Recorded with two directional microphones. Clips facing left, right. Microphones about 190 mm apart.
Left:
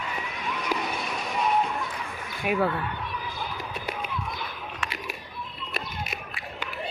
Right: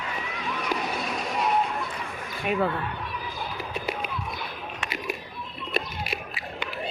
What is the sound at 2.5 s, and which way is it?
Speech, 5° left (ahead or behind).